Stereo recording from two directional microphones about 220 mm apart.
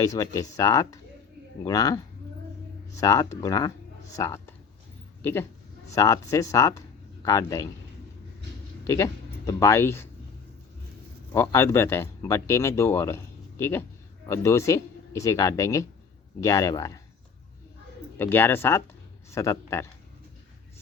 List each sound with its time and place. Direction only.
0.0 s speech: 15° left (ahead or behind)
3.0 s speech: 15° left (ahead or behind)
9.5 s speech: 15° left (ahead or behind)
11.3 s speech: 10° left (ahead or behind)
18.2 s speech: 10° left (ahead or behind)